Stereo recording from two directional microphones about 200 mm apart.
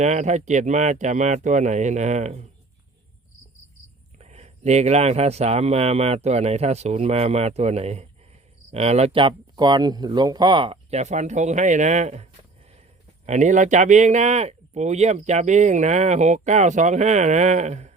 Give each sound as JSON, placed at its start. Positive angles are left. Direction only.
{"t": 0.0, "sound": "speech", "side_deg": -35}
{"t": 4.2, "sound": "speech", "side_deg": -35}